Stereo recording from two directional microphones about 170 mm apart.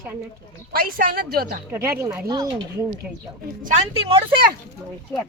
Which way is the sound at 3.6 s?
35° right (ahead or behind).